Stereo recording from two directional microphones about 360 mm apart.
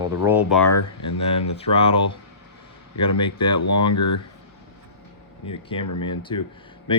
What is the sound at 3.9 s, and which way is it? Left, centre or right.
Speech, left.